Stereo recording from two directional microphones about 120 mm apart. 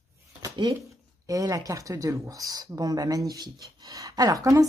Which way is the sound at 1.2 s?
30° right (ahead or behind).